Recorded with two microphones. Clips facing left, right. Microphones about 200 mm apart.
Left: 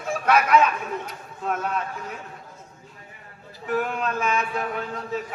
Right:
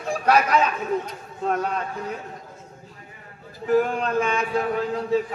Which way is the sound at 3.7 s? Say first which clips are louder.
Right 5 dB; 35° right (ahead or behind).